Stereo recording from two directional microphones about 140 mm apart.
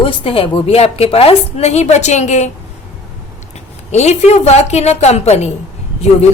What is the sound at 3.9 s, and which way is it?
A woman's voice, 50° left (ahead or behind).